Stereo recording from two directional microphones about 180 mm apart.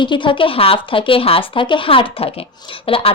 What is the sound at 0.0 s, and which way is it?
Speech, 25° left (ahead or behind).